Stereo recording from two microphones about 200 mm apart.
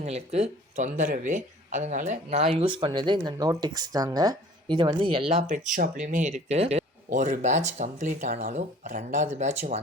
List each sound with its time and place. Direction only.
0.0 s speech: 30° right (ahead or behind)